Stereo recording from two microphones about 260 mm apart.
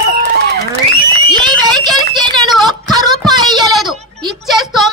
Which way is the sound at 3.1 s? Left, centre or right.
Centre.